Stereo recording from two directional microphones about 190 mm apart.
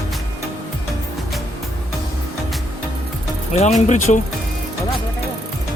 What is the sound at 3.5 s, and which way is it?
Speech, 35° left (ahead or behind).